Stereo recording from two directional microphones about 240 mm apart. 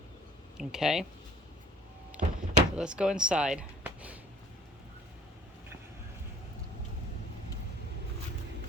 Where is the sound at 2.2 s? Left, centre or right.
Right.